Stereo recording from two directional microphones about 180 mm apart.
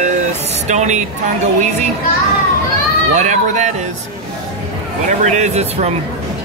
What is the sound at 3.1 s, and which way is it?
Speech, 40° right (ahead or behind).